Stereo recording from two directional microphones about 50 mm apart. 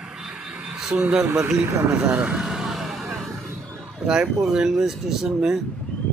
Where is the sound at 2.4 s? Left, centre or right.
Centre.